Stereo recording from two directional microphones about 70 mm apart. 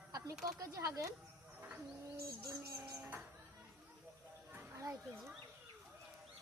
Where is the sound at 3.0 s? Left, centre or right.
Right.